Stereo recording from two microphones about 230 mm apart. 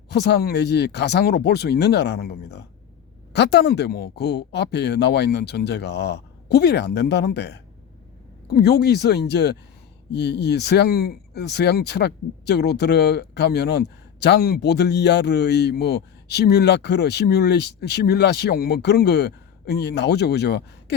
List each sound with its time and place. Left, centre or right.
0.1 s speech: left